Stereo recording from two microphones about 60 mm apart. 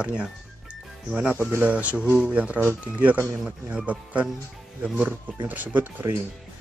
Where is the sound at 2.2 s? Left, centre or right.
Right.